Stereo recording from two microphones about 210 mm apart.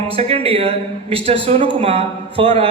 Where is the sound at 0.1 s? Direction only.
30° right (ahead or behind).